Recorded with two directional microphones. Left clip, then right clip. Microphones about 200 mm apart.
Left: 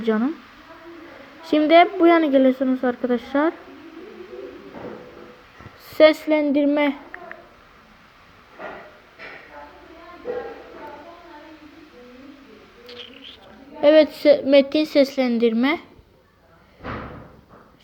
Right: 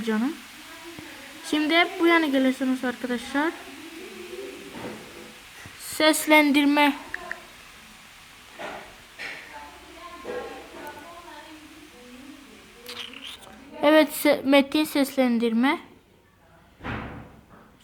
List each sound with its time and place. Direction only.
0.0 s a woman's voice: 5° right (ahead or behind)
1.5 s speech: centre (ahead or behind)
5.8 s a sound: centre (ahead or behind)
6.1 s a woman's voice: 25° right (ahead or behind)
12.8 s bird: 30° right (ahead or behind)
13.8 s a woman's voice: 25° right (ahead or behind)